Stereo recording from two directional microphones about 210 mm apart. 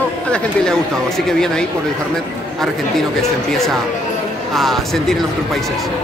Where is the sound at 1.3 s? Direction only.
5° left (ahead or behind).